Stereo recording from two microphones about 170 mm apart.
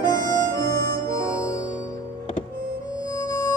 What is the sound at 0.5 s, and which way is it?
Harmonica, 20° left (ahead or behind).